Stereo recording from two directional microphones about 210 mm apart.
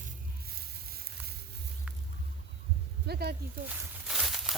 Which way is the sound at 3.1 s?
50° right (ahead or behind).